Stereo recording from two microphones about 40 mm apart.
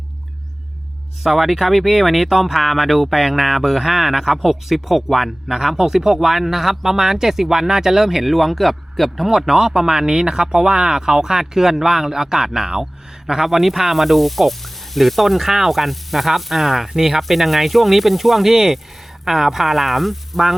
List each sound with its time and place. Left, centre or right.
1.2 s speech: centre
13.4 s sizzle: centre